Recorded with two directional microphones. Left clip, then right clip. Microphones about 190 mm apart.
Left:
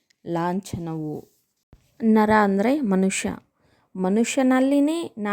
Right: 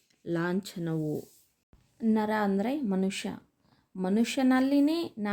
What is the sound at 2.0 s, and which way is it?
A woman's voice, 45° left (ahead or behind).